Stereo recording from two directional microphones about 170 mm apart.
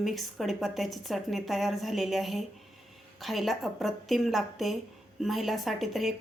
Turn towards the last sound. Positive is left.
turn(degrees=0)  # may be behind; listen again after turning